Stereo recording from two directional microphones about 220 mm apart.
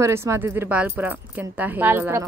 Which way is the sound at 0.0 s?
10° right (ahead or behind).